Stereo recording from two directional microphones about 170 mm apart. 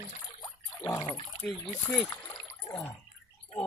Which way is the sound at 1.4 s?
Centre (ahead or behind).